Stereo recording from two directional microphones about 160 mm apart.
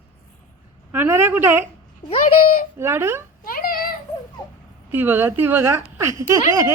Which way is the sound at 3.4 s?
65° left (ahead or behind).